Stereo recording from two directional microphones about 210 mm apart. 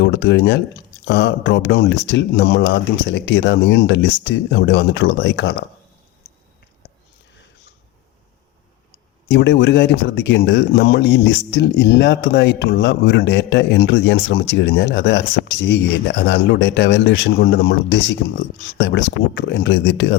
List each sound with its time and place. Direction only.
0.0 s speech: 55° left (ahead or behind)
9.3 s speech: 55° left (ahead or behind)